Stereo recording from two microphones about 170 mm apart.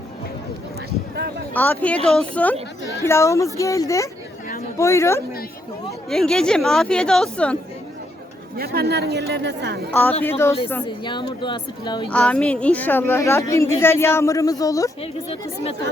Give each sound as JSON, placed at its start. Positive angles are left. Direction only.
{"t": 0.9, "sound": "speech", "side_deg": -70}
{"t": 1.5, "sound": "a woman's voice", "side_deg": 10}
{"t": 6.1, "sound": "a woman's voice", "side_deg": 5}
{"t": 8.5, "sound": "a woman's voice", "side_deg": -65}
{"t": 9.9, "sound": "a woman's voice", "side_deg": 10}
{"t": 10.8, "sound": "speech", "side_deg": 25}
{"t": 12.1, "sound": "a woman's voice", "side_deg": 5}